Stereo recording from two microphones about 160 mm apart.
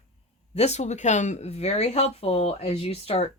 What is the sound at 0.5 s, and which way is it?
Speech, 40° left (ahead or behind).